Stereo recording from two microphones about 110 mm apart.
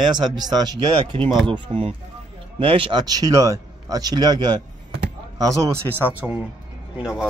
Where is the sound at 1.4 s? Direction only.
50° right (ahead or behind).